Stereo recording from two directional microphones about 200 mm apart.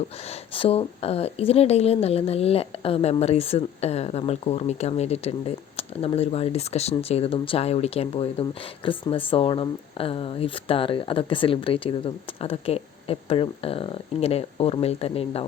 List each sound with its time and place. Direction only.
0.3 s a woman's voice: 30° left (ahead or behind)